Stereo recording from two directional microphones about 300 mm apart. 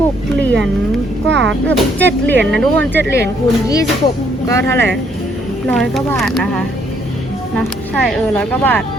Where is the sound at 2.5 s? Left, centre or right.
Centre.